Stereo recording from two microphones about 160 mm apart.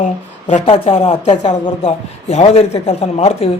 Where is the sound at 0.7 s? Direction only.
40° left (ahead or behind).